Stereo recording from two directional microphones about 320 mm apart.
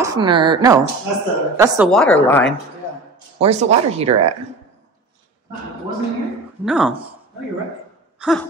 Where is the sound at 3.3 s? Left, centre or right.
Right.